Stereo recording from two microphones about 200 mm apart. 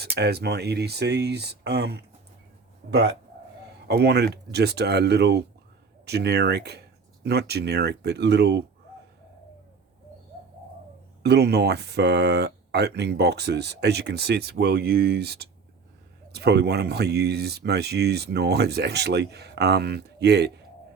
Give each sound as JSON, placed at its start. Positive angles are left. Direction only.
{"t": 0.0, "sound": "speech", "side_deg": -55}
{"t": 3.8, "sound": "speech", "side_deg": -55}
{"t": 11.2, "sound": "speech", "side_deg": -55}